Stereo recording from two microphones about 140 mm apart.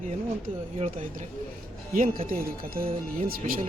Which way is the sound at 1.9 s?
90° right.